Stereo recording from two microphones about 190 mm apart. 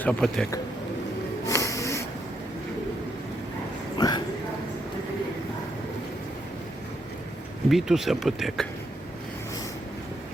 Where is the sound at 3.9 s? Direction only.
25° left (ahead or behind).